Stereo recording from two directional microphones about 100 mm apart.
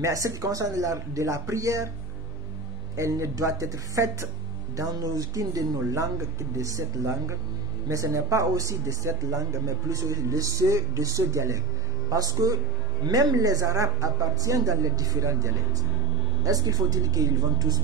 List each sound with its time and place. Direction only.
0.0 s speech: 35° right (ahead or behind)
3.0 s speech: 30° right (ahead or behind)
7.9 s speech: 35° right (ahead or behind)